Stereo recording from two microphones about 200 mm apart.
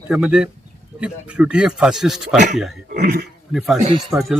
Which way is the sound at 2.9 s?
45° right (ahead or behind).